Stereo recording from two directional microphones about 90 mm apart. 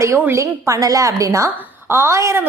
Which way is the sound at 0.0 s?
35° right (ahead or behind).